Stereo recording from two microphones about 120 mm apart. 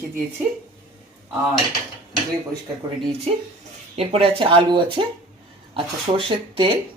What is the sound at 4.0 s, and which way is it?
Speech, 50° right (ahead or behind).